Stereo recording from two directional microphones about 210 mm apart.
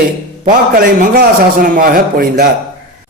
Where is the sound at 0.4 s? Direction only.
40° right (ahead or behind).